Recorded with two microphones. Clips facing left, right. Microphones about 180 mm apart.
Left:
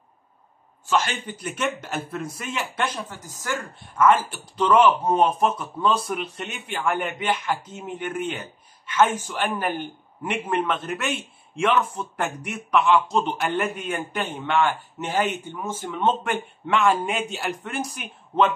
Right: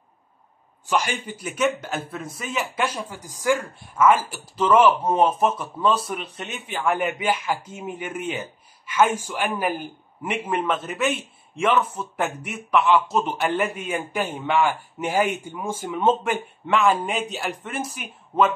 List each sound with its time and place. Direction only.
0.8 s a man's voice: 15° right (ahead or behind)